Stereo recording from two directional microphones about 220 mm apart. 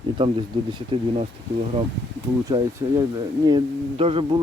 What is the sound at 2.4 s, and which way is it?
Speech, 15° right (ahead or behind).